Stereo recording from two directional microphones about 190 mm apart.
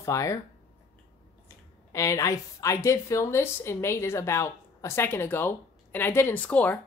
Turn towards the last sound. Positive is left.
turn(degrees=10)  # may be behind; listen again after turning